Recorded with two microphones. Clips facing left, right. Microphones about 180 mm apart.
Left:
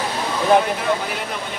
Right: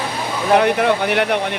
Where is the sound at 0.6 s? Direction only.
70° right (ahead or behind).